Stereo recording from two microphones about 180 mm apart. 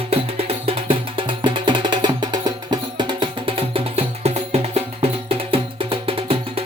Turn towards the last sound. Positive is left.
turn(degrees=-30)  # may be behind; listen again after turning